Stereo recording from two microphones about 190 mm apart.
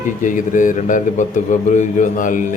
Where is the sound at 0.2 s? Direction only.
45° left (ahead or behind).